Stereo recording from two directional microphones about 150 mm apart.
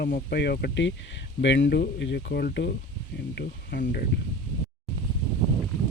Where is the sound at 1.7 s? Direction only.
90° left.